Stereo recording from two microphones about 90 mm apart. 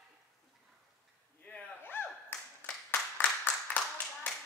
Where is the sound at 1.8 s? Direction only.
25° left (ahead or behind).